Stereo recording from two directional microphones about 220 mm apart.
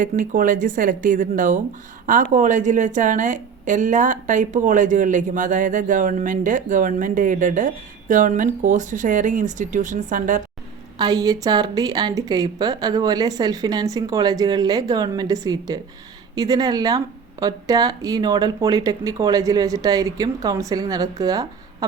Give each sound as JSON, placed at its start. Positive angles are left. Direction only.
{"t": 0.0, "sound": "a woman's voice", "side_deg": -35}
{"t": 10.9, "sound": "speech", "side_deg": -20}